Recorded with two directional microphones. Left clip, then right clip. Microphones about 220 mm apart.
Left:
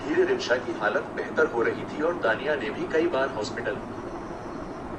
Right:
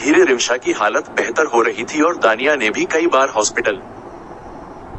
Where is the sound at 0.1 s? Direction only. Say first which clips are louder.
Right 10 dB; 45° right (ahead or behind).